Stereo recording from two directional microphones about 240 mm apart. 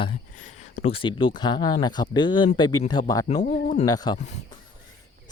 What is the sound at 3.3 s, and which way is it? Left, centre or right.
Speech, left.